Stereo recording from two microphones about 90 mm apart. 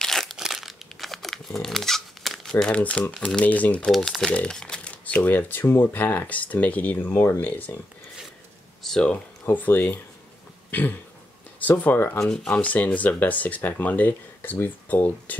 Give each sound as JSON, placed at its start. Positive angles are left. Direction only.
{"t": 0.0, "sound": "crumpling", "side_deg": 5}
{"t": 2.6, "sound": "speech", "side_deg": 15}
{"t": 3.9, "sound": "speech", "side_deg": 0}
{"t": 8.8, "sound": "speech", "side_deg": 5}
{"t": 9.1, "sound": "speech", "side_deg": 20}
{"t": 10.7, "sound": "a sound", "side_deg": 20}
{"t": 11.6, "sound": "speech", "side_deg": 20}
{"t": 12.2, "sound": "speech", "side_deg": 10}